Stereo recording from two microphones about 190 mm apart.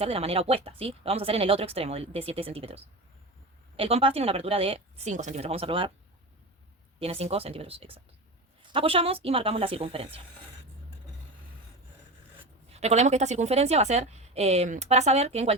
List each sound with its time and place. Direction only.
0.0 s a woman's voice: 30° right (ahead or behind)
7.0 s a woman's voice: 30° right (ahead or behind)
12.7 s a woman's voice: 35° right (ahead or behind)